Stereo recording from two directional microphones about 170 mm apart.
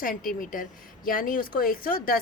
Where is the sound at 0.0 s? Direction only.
55° left (ahead or behind).